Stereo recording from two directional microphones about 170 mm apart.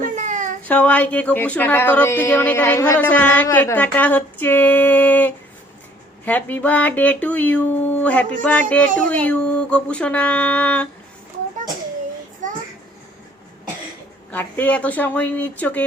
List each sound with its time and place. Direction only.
0.0 s a sound: 50° right (ahead or behind)
0.7 s speech: 10° left (ahead or behind)
14.3 s speech: 10° left (ahead or behind)